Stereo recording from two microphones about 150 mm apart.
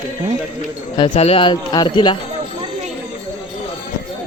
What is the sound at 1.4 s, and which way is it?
Speech, 30° left (ahead or behind).